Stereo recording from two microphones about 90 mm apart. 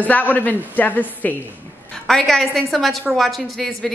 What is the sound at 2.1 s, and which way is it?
A woman's voice, 5° left (ahead or behind).